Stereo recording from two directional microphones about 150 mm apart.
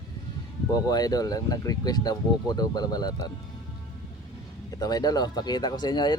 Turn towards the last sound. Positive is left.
turn(degrees=30)  # may be behind; listen again after turning